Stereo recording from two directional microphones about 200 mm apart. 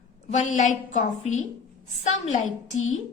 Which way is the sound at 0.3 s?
35° left (ahead or behind).